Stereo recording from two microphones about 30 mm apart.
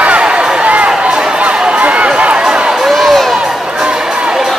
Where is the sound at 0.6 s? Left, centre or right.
Right.